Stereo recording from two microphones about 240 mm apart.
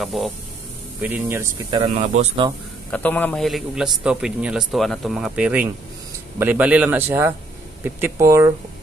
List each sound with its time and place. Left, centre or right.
0.0 s a man's voice: centre
2.0 s speech: right
2.9 s a man's voice: centre